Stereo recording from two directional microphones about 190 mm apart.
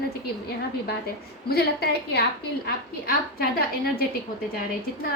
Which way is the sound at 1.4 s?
55° left (ahead or behind).